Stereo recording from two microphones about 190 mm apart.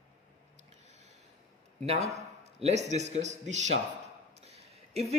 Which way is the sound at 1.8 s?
35° right (ahead or behind).